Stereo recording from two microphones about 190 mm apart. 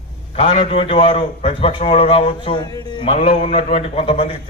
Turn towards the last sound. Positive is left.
turn(degrees=30)  # may be behind; listen again after turning